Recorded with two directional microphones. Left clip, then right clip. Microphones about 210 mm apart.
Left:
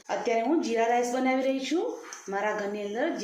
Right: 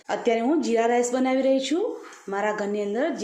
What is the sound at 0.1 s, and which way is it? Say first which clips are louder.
A woman's voice: right 3 dB; 55° right (ahead or behind).